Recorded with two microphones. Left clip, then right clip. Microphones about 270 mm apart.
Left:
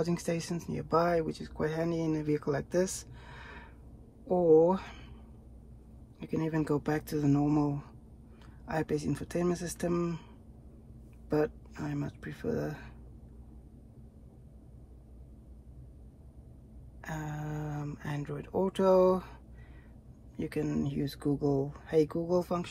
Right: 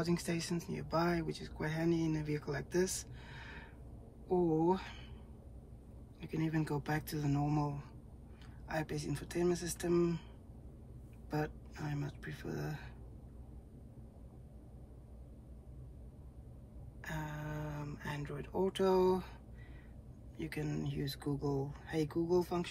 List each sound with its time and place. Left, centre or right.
0.0 s speech: centre
6.1 s speech: centre
11.2 s speech: centre
17.0 s speech: centre
20.3 s speech: centre